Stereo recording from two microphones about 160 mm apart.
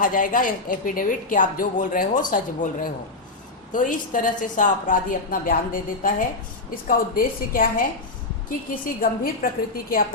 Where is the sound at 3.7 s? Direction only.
55° left (ahead or behind).